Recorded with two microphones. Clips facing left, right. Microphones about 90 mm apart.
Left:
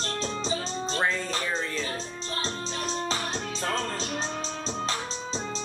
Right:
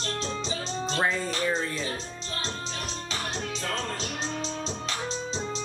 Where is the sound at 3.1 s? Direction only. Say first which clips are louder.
Left 2 dB; 35° left (ahead or behind).